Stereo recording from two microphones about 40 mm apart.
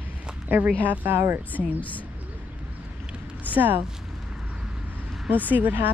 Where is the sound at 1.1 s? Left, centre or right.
Right.